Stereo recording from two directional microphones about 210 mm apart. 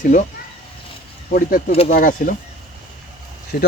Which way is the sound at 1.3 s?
40° left (ahead or behind).